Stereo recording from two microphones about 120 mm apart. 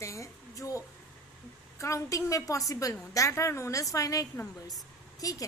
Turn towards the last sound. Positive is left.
turn(degrees=30)  # may be behind; listen again after turning